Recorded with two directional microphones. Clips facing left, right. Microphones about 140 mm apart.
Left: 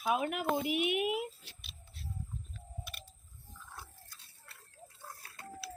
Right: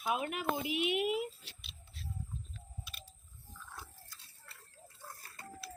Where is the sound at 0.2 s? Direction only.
50° left (ahead or behind).